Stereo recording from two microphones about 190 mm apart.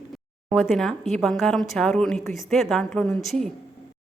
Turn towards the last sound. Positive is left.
turn(degrees=0)  # may be behind; listen again after turning